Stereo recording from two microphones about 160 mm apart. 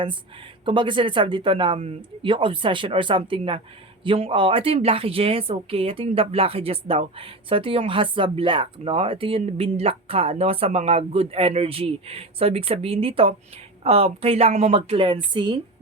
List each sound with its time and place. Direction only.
0.6 s speech: 30° right (ahead or behind)